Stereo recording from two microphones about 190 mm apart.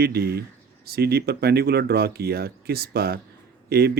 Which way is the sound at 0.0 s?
55° right (ahead or behind).